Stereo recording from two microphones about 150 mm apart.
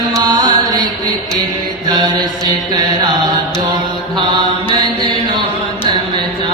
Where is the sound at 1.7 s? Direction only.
25° right (ahead or behind).